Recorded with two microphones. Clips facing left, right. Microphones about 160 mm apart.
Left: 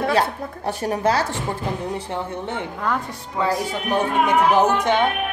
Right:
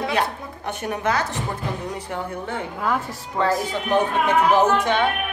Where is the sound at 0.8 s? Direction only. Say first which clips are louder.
Left 3 dB; 35° left (ahead or behind).